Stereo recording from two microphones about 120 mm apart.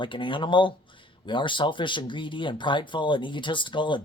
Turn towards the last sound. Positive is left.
turn(degrees=45)  # may be behind; listen again after turning